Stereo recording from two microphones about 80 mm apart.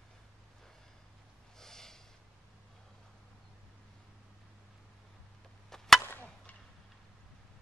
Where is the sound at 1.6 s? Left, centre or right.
Centre.